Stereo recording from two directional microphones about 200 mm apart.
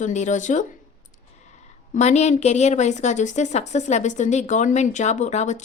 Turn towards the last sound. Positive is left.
turn(degrees=35)  # may be behind; listen again after turning